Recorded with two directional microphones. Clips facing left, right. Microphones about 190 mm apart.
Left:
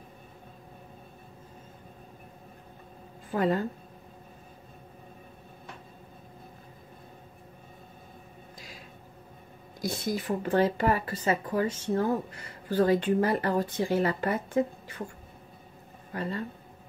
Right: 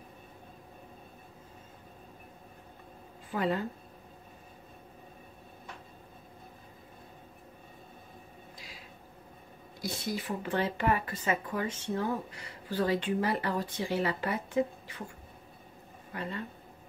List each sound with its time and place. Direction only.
3.3 s a woman's voice: 45° left (ahead or behind)
9.8 s a woman's voice: 45° left (ahead or behind)
16.1 s speech: 40° left (ahead or behind)